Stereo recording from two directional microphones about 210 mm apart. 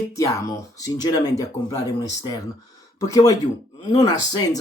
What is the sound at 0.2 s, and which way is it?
Speech, 15° left (ahead or behind).